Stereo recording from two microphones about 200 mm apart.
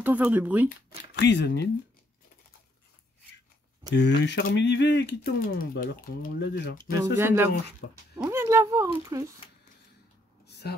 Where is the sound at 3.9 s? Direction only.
60° left (ahead or behind).